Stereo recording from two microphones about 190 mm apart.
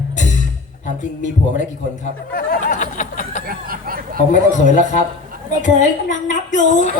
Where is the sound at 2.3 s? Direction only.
45° left (ahead or behind).